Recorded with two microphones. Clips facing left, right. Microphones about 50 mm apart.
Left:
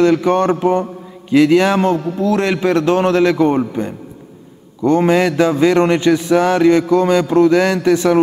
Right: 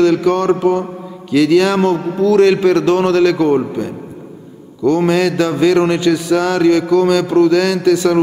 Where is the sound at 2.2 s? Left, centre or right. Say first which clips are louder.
Right 7 dB; left.